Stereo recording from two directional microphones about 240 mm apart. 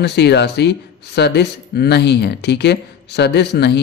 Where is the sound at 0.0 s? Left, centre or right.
Left.